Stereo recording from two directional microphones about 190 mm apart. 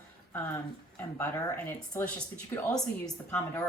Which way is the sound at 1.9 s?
10° left (ahead or behind).